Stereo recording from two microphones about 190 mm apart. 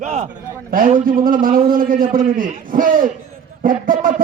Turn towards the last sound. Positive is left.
turn(degrees=-45)  # may be behind; listen again after turning